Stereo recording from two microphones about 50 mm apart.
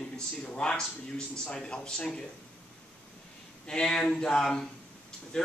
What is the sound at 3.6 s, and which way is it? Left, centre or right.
Speech, centre.